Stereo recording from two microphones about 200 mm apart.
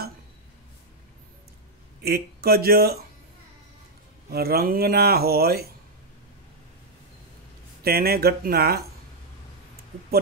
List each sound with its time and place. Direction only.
2.0 s speech: 50° right (ahead or behind)
4.3 s speech: 50° right (ahead or behind)
7.8 s speech: 50° right (ahead or behind)